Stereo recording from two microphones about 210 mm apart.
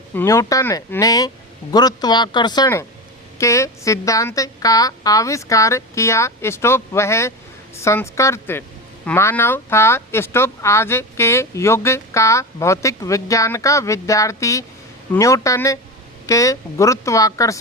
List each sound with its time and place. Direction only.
0.1 s speech: 10° left (ahead or behind)